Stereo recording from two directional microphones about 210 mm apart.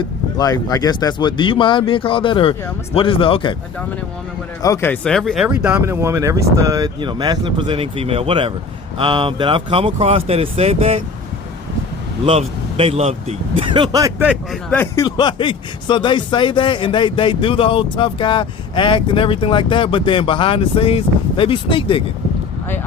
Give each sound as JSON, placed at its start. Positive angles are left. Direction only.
{"t": 0.3, "sound": "speech", "side_deg": 15}
{"t": 4.6, "sound": "speech", "side_deg": 15}
{"t": 5.6, "sound": "speech", "side_deg": -10}
{"t": 12.2, "sound": "speech", "side_deg": -30}
{"t": 14.3, "sound": "speech", "side_deg": 5}
{"t": 14.9, "sound": "speech", "side_deg": 20}